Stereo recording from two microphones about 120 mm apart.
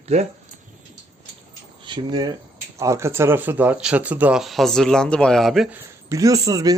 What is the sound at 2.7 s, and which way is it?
Speech, 25° right (ahead or behind).